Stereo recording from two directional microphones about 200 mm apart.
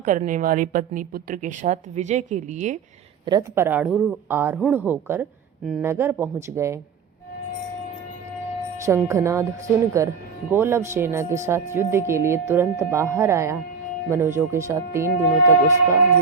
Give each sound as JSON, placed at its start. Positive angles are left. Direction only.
{"t": 0.0, "sound": "a woman's voice", "side_deg": -40}
{"t": 3.2, "sound": "speech", "side_deg": -15}
{"t": 8.8, "sound": "speech", "side_deg": -15}